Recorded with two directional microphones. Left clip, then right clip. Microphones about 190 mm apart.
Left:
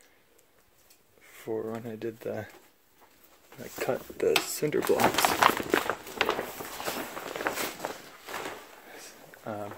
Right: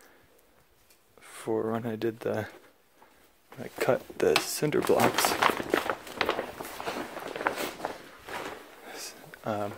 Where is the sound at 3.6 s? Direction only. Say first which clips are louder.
Right 4 dB; 30° right (ahead or behind).